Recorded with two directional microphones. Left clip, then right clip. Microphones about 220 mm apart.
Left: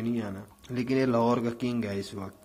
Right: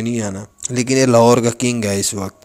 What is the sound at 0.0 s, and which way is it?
A man's voice, 40° right (ahead or behind).